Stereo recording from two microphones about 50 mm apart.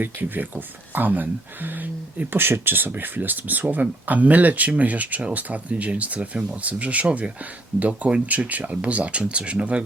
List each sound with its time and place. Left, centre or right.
0.0 s speech: right